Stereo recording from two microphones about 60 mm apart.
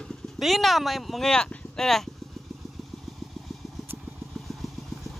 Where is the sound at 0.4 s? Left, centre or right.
Centre.